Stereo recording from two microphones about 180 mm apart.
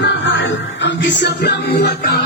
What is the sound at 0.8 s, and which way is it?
Music, 75° left (ahead or behind).